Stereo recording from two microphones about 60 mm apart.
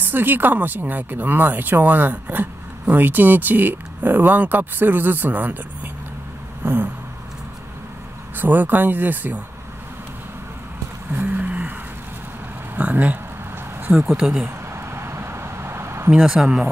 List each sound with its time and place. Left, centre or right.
0.0 s speech: right
6.6 s a sound: right
8.4 s speech: right
11.1 s vehicle: right
12.7 s speech: right
13.9 s speech: centre
14.7 s vehicle: right
16.2 s speech: centre